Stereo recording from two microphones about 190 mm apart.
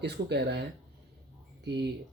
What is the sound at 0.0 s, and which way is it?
Speech, 60° right (ahead or behind).